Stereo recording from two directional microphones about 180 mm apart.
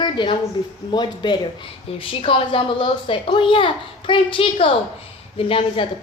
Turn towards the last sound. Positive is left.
turn(degrees=30)  # may be behind; listen again after turning